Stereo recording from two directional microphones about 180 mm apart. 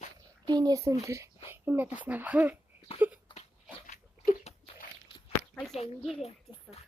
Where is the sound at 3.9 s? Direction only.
45° left (ahead or behind).